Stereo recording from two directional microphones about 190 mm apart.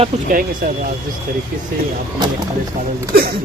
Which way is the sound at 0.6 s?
55° right (ahead or behind).